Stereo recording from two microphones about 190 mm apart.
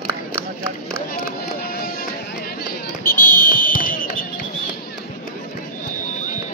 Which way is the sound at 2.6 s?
50° left (ahead or behind).